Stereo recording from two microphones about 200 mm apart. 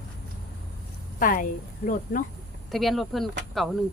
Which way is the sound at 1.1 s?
45° left (ahead or behind).